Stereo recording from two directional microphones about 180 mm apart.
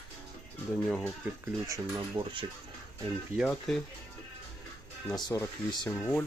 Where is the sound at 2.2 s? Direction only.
30° right (ahead or behind).